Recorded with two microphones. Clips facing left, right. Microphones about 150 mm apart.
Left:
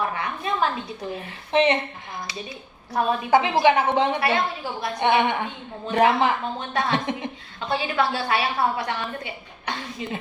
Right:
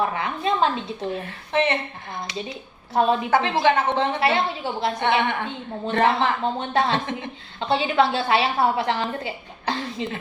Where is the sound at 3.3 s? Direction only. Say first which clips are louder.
Left 4 dB; 15° left (ahead or behind).